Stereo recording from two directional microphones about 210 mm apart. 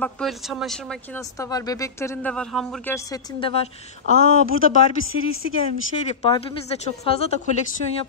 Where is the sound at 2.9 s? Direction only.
20° left (ahead or behind).